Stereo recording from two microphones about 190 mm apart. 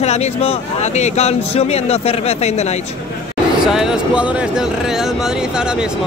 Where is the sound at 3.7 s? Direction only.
5° right (ahead or behind).